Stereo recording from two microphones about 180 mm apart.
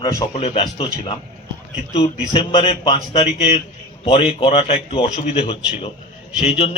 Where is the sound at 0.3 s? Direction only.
35° left (ahead or behind).